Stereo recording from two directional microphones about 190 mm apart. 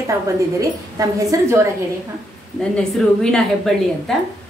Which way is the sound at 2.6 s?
5° left (ahead or behind).